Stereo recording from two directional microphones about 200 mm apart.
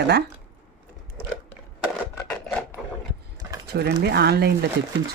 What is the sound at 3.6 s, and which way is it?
Speech, 55° right (ahead or behind).